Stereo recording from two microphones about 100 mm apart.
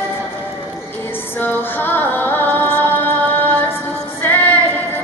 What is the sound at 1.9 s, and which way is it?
Music, 20° left (ahead or behind).